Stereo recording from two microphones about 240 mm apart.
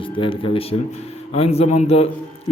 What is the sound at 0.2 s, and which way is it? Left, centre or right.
A man's voice, left.